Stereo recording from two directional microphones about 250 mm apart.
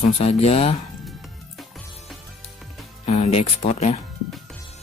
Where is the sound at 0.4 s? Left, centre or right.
Left.